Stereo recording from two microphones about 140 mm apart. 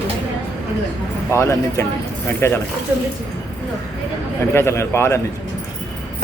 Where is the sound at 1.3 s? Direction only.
20° left (ahead or behind).